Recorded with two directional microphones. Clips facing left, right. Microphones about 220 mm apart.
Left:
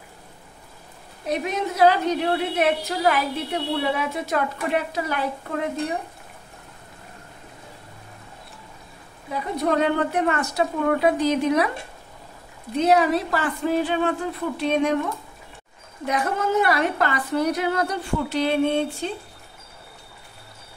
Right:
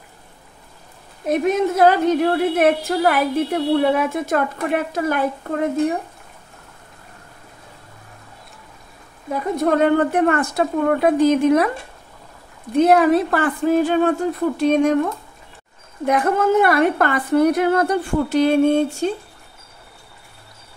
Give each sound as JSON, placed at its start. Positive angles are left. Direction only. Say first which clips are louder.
{"t": 1.2, "sound": "a woman's voice", "louder": "right 7 dB", "side_deg": -50}
{"t": 9.3, "sound": "a woman's voice", "louder": "right 5 dB", "side_deg": -50}
{"t": 12.7, "sound": "a woman's voice", "louder": "right 5 dB", "side_deg": -55}
{"t": 16.1, "sound": "a woman's voice", "louder": "right 6 dB", "side_deg": -55}